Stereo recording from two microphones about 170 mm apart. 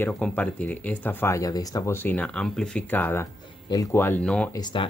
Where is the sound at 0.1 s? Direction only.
10° left (ahead or behind).